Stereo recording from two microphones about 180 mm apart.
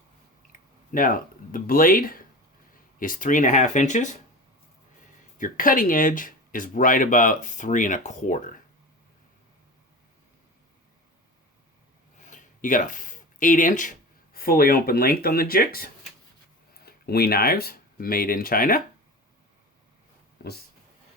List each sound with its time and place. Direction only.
0.9 s speech: 50° left (ahead or behind)
5.4 s speech: 50° left (ahead or behind)
12.2 s a sound: 45° left (ahead or behind)
14.3 s speech: 55° left (ahead or behind)